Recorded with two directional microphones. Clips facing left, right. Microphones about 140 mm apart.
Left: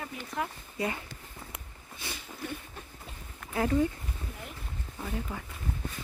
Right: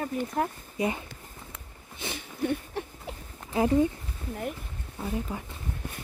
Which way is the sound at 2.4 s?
70° right (ahead or behind).